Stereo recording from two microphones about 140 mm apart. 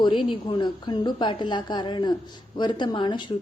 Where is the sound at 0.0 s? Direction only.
35° left (ahead or behind).